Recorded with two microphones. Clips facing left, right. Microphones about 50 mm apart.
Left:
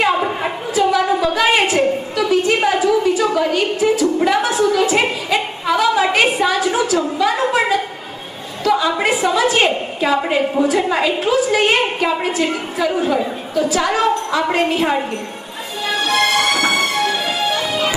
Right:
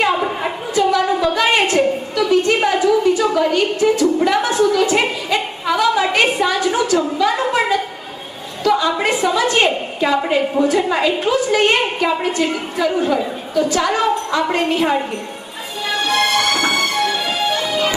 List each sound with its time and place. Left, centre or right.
0.0 s a sound: centre
7.2 s a woman's voice: centre
15.9 s music: centre